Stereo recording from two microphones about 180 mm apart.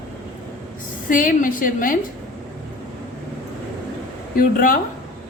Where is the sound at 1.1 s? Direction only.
50° left (ahead or behind).